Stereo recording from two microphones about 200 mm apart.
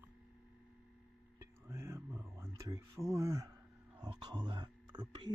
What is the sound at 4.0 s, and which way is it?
Speech, 20° right (ahead or behind).